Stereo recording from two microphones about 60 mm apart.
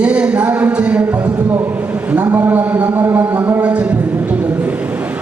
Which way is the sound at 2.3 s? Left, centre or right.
Right.